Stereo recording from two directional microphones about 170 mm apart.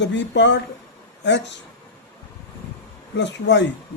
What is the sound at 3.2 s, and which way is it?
Speech, 90° left.